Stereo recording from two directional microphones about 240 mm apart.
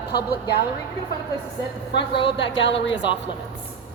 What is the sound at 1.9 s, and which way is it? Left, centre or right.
A woman's voice, left.